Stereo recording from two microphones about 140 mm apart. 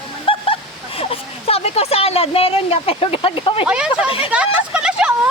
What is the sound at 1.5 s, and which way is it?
Speech, 45° left (ahead or behind).